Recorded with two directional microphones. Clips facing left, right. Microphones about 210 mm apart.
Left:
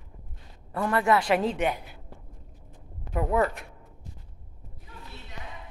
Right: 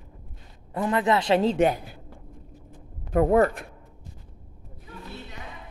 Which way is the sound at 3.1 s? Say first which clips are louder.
Right 6 dB; 50° right (ahead or behind).